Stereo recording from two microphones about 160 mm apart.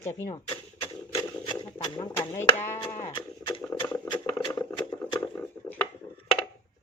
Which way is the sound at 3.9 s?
20° left (ahead or behind).